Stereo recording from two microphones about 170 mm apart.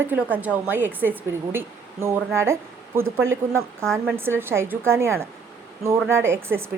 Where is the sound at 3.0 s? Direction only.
15° right (ahead or behind).